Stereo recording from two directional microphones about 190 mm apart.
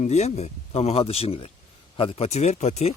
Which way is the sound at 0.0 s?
35° left (ahead or behind).